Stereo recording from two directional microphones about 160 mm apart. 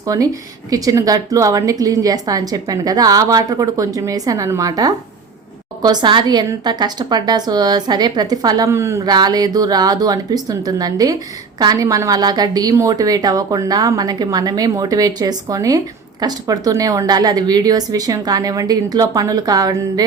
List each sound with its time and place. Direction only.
0.0 s a woman's voice: 20° right (ahead or behind)